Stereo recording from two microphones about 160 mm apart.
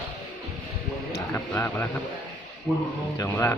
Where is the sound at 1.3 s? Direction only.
10° left (ahead or behind).